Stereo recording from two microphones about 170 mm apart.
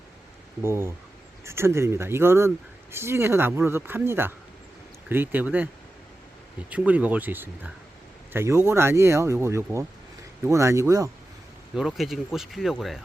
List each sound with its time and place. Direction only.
0.6 s speech: 15° right (ahead or behind)
6.7 s speech: 10° right (ahead or behind)
11.7 s speech: centre (ahead or behind)